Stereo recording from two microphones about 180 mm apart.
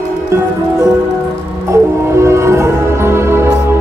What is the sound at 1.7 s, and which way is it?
Music, 15° right (ahead or behind).